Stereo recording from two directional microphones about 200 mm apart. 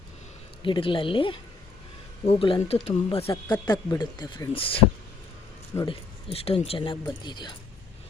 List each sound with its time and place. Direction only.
0.6 s speech: 25° left (ahead or behind)
5.7 s speech: 15° left (ahead or behind)
6.3 s speech: 30° left (ahead or behind)